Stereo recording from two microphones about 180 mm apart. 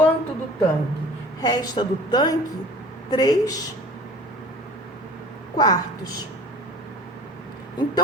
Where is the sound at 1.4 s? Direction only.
20° left (ahead or behind).